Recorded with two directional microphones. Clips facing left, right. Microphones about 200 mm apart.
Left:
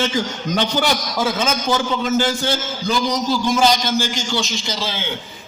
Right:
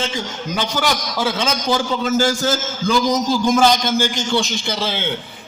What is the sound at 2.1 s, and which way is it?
A man's voice, 40° right (ahead or behind).